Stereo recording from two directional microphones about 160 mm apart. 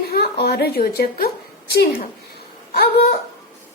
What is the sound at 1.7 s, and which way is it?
A woman's voice, 85° left.